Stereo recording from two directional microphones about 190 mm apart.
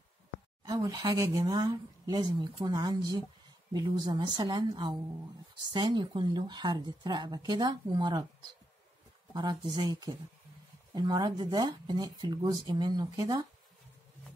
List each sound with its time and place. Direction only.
0.7 s speech: 20° right (ahead or behind)
9.3 s speech: 20° right (ahead or behind)